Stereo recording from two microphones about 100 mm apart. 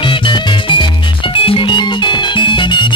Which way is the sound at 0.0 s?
55° left (ahead or behind).